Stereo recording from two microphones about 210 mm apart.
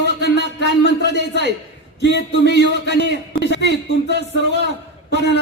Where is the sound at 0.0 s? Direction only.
55° left (ahead or behind).